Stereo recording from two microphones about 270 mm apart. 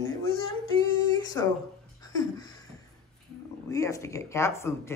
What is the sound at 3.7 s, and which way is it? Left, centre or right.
Speech, centre.